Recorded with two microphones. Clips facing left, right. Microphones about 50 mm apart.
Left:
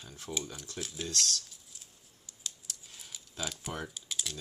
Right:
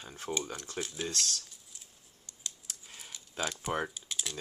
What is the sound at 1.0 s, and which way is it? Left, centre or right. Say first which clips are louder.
Speech: left 2 dB; right.